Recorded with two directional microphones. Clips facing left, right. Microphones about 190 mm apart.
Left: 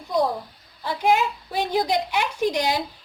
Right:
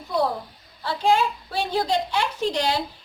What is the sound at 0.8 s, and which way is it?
A woman's voice, 15° left (ahead or behind).